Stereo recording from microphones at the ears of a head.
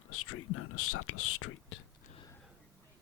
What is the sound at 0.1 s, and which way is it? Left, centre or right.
Speech, left.